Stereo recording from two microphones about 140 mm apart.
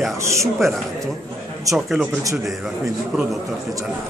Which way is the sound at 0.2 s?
20° right (ahead or behind).